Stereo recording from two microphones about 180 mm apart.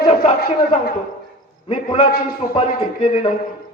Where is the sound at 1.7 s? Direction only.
30° left (ahead or behind).